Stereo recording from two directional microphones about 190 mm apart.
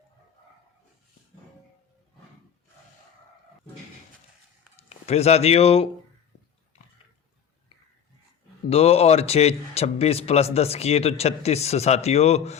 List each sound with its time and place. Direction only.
4.8 s speech: 35° left (ahead or behind)
8.7 s speech: 30° left (ahead or behind)